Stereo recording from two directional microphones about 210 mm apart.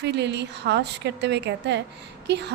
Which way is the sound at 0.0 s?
55° right (ahead or behind).